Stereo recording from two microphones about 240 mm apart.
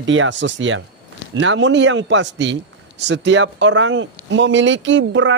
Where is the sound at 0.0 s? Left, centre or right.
Right.